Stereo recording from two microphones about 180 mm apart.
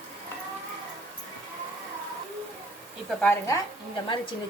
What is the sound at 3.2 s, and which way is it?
Speech, 10° left (ahead or behind).